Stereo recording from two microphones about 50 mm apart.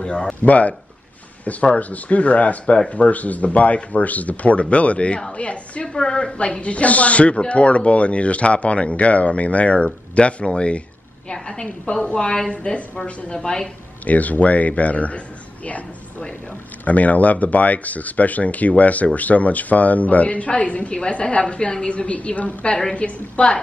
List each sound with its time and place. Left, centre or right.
0.0 s speech: centre
0.4 s a woman's voice: left; by 13.7 s centre
14.0 s speech: left